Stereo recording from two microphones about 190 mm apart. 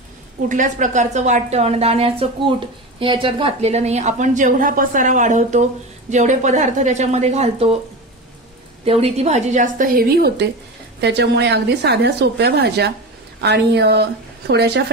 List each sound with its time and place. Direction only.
0.5 s a woman's voice: 40° right (ahead or behind)
8.8 s a woman's voice: 30° right (ahead or behind); by 14.9 s 60° right (ahead or behind)